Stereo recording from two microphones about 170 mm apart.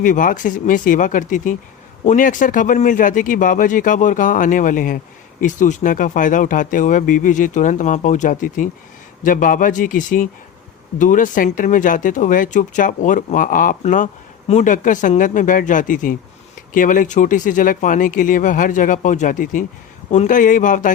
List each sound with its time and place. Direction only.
0.0 s speech: 50° left (ahead or behind)